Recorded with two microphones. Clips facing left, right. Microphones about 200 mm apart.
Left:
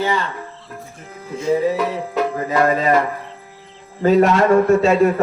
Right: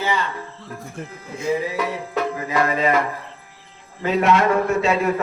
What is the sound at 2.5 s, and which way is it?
Speech, 40° left (ahead or behind).